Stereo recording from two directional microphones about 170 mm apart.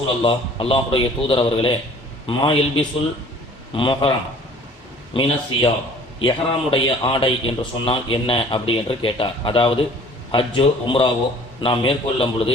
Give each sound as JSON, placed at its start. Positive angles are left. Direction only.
{"t": 0.2, "sound": "a man's voice", "side_deg": 30}
{"t": 5.1, "sound": "a man's voice", "side_deg": 30}